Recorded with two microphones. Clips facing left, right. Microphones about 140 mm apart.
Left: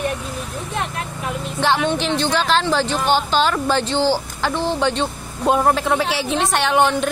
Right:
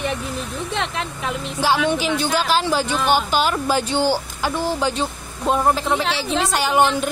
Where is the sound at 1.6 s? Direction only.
5° right (ahead or behind).